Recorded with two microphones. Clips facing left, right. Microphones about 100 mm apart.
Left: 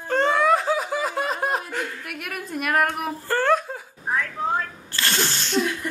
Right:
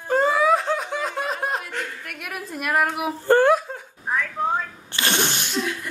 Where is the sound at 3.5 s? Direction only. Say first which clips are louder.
Even; centre (ahead or behind).